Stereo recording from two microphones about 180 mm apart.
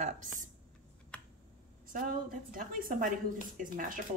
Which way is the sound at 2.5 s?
50° right (ahead or behind).